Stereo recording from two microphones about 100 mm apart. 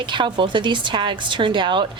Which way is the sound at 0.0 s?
50° right (ahead or behind).